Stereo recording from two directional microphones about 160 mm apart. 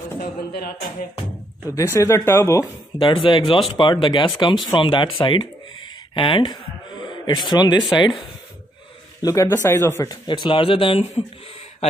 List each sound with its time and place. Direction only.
0.2 s speech: 75° left (ahead or behind)
1.8 s speech: 20° left (ahead or behind)
3.0 s speech: 30° left (ahead or behind)
9.2 s speech: 20° left (ahead or behind)
10.2 s speech: 30° left (ahead or behind)